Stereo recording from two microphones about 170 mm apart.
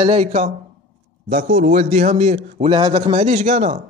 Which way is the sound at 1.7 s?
40° right (ahead or behind).